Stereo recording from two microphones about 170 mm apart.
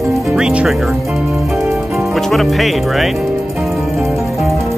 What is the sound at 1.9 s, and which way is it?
Music, centre (ahead or behind).